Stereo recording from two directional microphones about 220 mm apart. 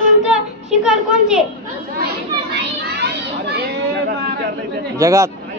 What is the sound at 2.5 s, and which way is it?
Children playing, 50° right (ahead or behind).